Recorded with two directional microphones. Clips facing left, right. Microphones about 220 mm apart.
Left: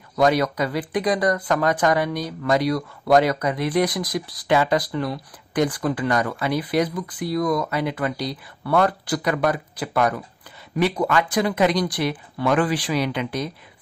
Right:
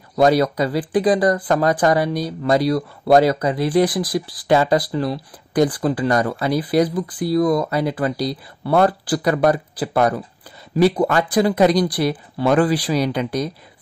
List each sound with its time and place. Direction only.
0.1 s speech: 35° right (ahead or behind)